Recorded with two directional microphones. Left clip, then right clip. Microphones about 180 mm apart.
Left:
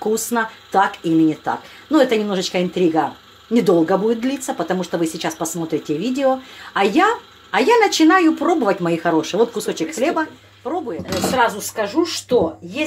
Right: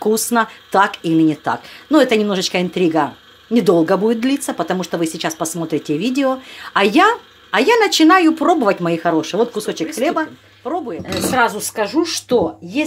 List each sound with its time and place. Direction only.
0.0 s speech: 35° right (ahead or behind)
11.3 s speech: 60° right (ahead or behind)